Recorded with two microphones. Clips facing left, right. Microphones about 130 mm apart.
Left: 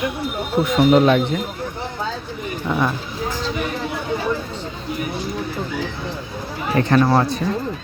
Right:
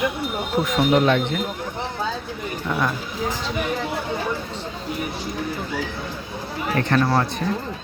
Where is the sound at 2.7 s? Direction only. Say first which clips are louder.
Left 3 dB; 15° left (ahead or behind).